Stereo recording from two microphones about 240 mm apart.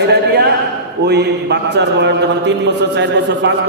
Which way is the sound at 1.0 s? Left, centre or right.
Right.